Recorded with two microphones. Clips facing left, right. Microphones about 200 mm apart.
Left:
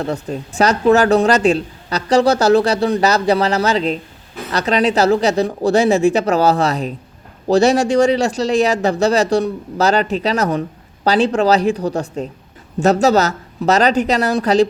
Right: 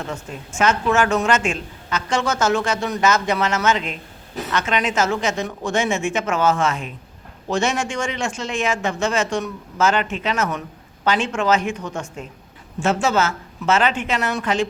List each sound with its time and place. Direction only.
0.0 s speech: 35° left (ahead or behind)